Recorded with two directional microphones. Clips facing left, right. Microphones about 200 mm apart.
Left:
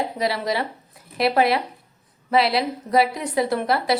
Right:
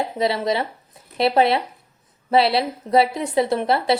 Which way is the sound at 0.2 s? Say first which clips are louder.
Right 4 dB; 25° right (ahead or behind).